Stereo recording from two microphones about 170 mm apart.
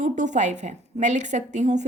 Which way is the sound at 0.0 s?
45° right (ahead or behind).